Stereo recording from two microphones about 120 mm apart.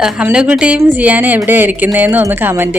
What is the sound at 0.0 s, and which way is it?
A woman's voice, 5° right (ahead or behind).